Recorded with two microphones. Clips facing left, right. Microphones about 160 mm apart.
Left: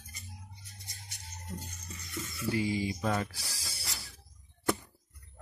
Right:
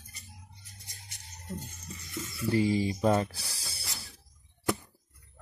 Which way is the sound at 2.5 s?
35° right (ahead or behind).